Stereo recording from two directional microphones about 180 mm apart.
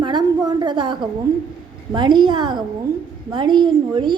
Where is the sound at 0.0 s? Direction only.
25° right (ahead or behind).